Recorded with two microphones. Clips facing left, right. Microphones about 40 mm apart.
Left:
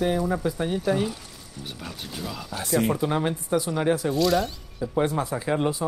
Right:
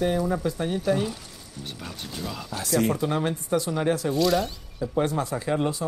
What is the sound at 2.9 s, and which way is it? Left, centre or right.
Speech, centre.